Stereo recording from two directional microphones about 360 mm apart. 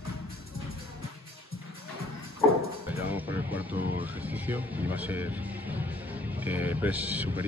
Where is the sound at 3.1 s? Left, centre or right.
Centre.